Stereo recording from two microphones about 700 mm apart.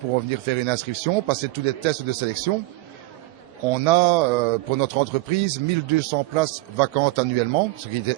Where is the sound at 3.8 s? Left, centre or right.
Right.